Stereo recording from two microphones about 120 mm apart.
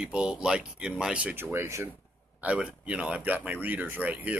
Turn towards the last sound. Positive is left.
turn(degrees=-15)  # may be behind; listen again after turning